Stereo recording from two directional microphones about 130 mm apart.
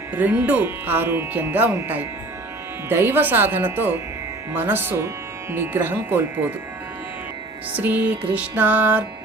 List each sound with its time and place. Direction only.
0.2 s speech: 15° right (ahead or behind)
7.8 s speech: 10° right (ahead or behind)